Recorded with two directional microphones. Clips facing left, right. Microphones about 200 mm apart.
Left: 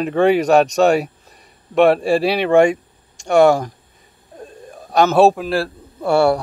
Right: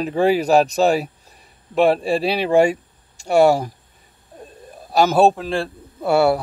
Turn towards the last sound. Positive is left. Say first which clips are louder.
# left 1 dB
turn(degrees=-5)  # may be behind; listen again after turning